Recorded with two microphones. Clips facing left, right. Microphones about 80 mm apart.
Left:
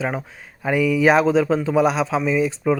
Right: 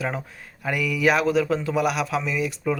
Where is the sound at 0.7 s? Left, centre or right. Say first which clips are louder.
Left 5 dB; left.